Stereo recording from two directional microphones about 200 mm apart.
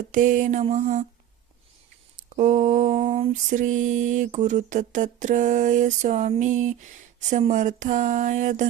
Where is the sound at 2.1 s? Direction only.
40° right (ahead or behind).